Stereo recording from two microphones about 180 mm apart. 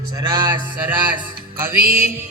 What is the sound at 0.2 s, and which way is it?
Speech, 25° right (ahead or behind).